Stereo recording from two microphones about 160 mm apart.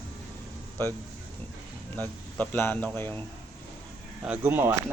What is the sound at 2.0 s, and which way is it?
Speech, 10° left (ahead or behind).